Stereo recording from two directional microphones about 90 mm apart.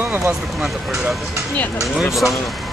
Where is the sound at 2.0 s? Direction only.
Centre (ahead or behind).